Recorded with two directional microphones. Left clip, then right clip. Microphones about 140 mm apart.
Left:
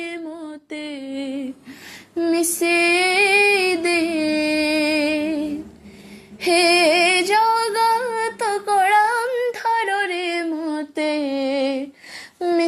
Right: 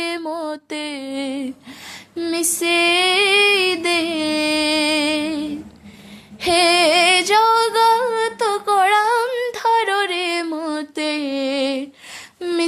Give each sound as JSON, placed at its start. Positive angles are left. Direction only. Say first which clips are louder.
{"t": 0.2, "sound": "music", "louder": "right 8 dB", "side_deg": -50}
{"t": 2.1, "sound": "female singing", "louder": "left 2 dB", "side_deg": -20}
{"t": 6.4, "sound": "female singing", "louder": "right 1 dB", "side_deg": -15}